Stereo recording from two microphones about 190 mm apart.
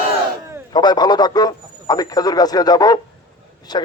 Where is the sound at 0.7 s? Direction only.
20° left (ahead or behind).